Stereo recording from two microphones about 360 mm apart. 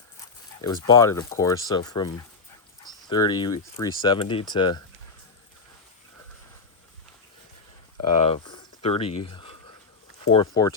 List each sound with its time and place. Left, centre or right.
0.6 s speech: centre
8.2 s speech: centre